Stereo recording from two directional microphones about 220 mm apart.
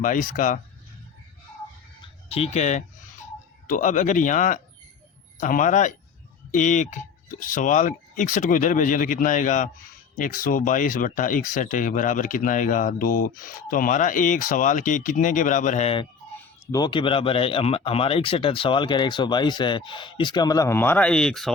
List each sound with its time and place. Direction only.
0.0 s speech: 35° left (ahead or behind)
2.3 s speech: 30° left (ahead or behind); by 21.5 s centre (ahead or behind)